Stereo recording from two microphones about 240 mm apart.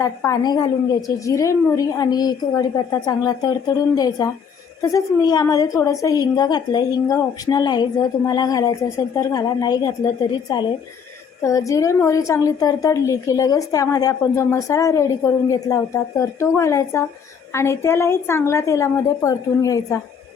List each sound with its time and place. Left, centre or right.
0.0 s a woman's voice: centre